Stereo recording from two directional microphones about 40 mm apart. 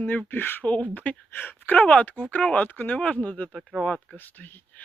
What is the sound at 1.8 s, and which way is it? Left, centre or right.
Speech, left.